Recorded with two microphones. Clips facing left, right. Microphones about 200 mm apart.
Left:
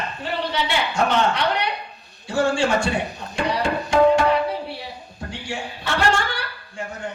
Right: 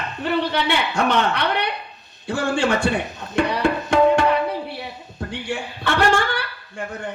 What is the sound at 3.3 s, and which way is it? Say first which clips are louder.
Tabla: right 3 dB; 60° right (ahead or behind).